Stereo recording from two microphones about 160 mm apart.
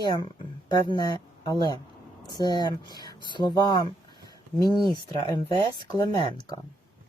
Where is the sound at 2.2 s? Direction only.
25° left (ahead or behind).